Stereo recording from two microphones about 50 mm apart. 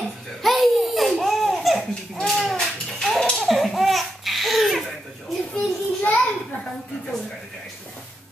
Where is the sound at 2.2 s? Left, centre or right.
Centre.